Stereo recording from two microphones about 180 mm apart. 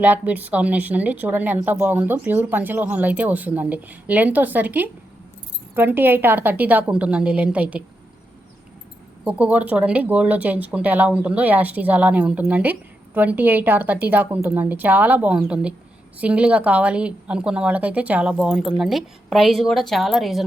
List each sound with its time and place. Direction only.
0.0 s a woman's voice: 10° right (ahead or behind)
9.2 s a woman's voice: 10° right (ahead or behind)